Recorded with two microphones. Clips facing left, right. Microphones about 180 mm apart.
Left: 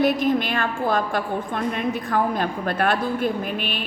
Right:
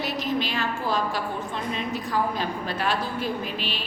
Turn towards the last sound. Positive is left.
turn(degrees=55)  # may be behind; listen again after turning